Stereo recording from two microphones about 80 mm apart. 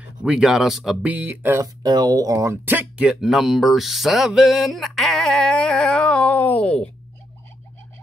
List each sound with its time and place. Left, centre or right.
0.2 s speech: centre
1.0 s speech: right
1.6 s speech: right
2.6 s speech: right; by 4.3 s centre
4.3 s a sound: centre